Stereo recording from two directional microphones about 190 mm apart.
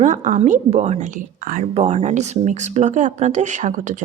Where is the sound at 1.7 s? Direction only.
30° right (ahead or behind).